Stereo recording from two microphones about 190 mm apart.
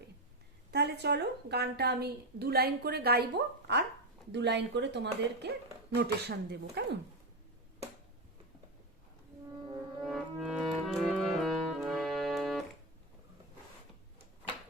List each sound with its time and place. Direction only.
0.7 s a woman's voice: 60° right (ahead or behind)
10.0 s music: centre (ahead or behind)